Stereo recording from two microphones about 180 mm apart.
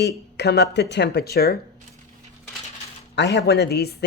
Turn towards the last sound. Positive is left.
turn(degrees=65)  # may be behind; listen again after turning